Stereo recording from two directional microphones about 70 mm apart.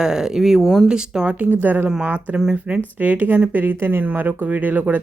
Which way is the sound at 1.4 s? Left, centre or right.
Right.